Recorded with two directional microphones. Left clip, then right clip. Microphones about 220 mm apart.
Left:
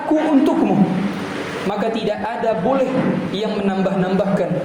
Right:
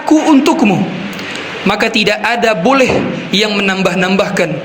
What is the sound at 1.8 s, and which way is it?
Speech, 45° right (ahead or behind).